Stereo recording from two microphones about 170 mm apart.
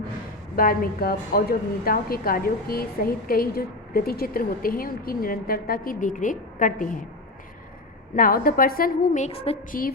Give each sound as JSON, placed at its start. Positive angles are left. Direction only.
{"t": 0.5, "sound": "a woman's voice", "side_deg": 55}
{"t": 8.1, "sound": "a woman's voice", "side_deg": 55}
{"t": 9.2, "sound": "a woman's voice", "side_deg": 35}